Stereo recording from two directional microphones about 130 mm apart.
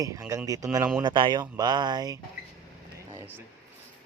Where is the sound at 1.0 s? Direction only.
35° right (ahead or behind).